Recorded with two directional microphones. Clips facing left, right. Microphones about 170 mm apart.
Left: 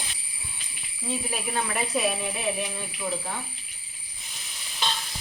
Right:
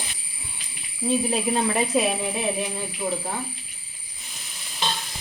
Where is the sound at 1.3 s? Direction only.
30° right (ahead or behind).